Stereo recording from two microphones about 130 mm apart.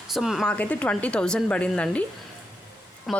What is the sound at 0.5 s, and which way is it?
Speech, 10° left (ahead or behind).